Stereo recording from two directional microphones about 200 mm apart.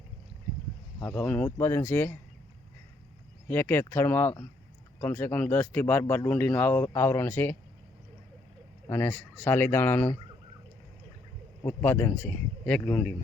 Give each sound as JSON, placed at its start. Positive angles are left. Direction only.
{"t": 1.0, "sound": "speech", "side_deg": 5}
{"t": 3.5, "sound": "speech", "side_deg": 10}
{"t": 8.9, "sound": "speech", "side_deg": 10}
{"t": 11.6, "sound": "speech", "side_deg": 10}